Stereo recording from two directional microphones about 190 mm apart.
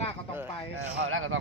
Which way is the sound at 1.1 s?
90° right.